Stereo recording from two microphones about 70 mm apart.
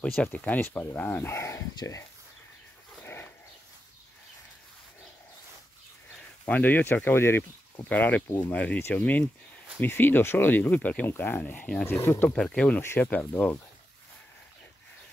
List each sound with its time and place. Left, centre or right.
0.2 s speech: left
3.0 s dog: left
6.4 s speech: left
7.9 s speech: left
9.8 s speech: left
12.3 s speech: centre; by 13.6 s left